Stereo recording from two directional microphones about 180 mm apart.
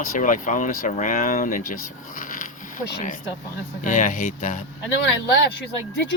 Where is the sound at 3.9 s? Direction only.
45° left (ahead or behind).